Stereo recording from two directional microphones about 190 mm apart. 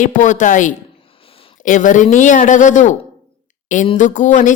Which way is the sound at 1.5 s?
45° left (ahead or behind).